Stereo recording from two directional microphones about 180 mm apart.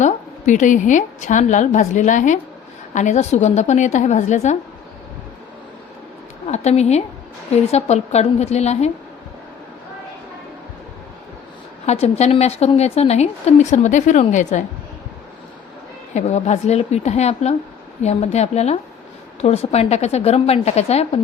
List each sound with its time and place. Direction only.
0.0 s a woman's voice: 45° left (ahead or behind)
6.5 s a woman's voice: 40° left (ahead or behind)
11.9 s a woman's voice: 35° left (ahead or behind)
16.1 s a woman's voice: 40° left (ahead or behind)